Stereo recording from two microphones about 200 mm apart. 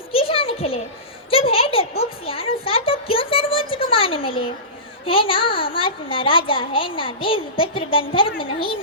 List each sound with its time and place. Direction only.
0.1 s a sound: 30° left (ahead or behind)
2.0 s music: 30° left (ahead or behind)
5.0 s a child's voice: 25° left (ahead or behind)